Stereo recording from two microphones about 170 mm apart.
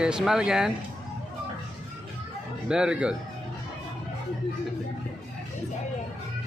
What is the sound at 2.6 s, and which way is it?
Speech, 5° right (ahead or behind).